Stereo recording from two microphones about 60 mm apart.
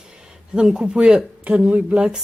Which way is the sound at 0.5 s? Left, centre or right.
Centre.